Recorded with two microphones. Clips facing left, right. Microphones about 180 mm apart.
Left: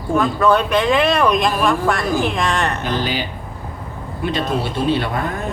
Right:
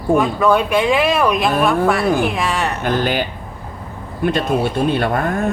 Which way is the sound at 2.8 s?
55° right (ahead or behind).